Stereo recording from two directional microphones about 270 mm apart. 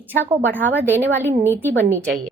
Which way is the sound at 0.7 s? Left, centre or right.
Centre.